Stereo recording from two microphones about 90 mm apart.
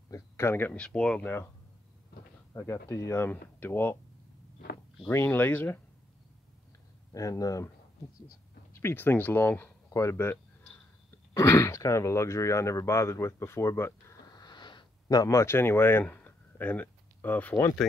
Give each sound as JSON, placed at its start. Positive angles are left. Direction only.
{"t": 0.1, "sound": "speech", "side_deg": 30}
{"t": 0.7, "sound": "speech", "side_deg": 10}
{"t": 2.5, "sound": "speech", "side_deg": 30}
{"t": 3.3, "sound": "speech", "side_deg": 20}
{"t": 5.1, "sound": "speech", "side_deg": 25}
{"t": 7.1, "sound": "speech", "side_deg": 40}
{"t": 8.7, "sound": "speech", "side_deg": 25}
{"t": 14.3, "sound": "a sound", "side_deg": 55}